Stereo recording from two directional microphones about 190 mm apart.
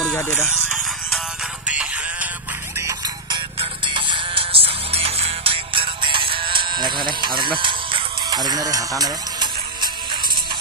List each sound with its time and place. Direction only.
0.0 s music: 10° left (ahead or behind)
1.7 s music: 5° right (ahead or behind)
2.8 s music: 20° right (ahead or behind)